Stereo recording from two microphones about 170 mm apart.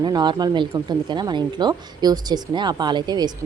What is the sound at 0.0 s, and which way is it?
Speech, 25° right (ahead or behind).